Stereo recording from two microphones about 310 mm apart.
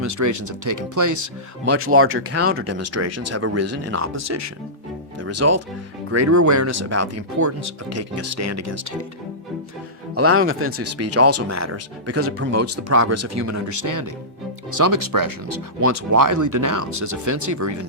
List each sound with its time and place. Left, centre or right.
0.0 s speech: right
10.2 s speech: right
15.9 s speech: right